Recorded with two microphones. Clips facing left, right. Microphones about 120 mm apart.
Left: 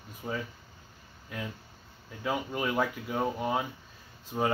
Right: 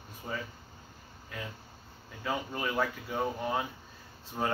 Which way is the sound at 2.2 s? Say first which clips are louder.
Left 3 dB; 5° left (ahead or behind).